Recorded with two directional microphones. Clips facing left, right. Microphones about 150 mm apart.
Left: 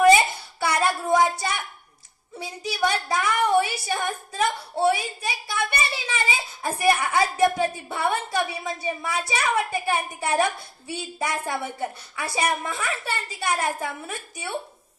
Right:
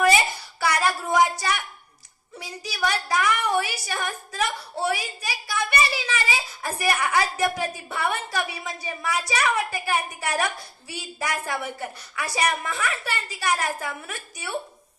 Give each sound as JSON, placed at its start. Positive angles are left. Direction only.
{"t": 0.7, "sound": "a woman's voice", "side_deg": 25}